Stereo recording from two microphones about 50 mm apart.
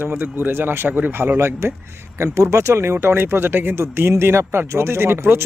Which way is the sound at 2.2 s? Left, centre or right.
Right.